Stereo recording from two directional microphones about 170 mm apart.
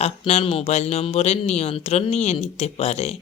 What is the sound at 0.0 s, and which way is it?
Speech, 40° left (ahead or behind).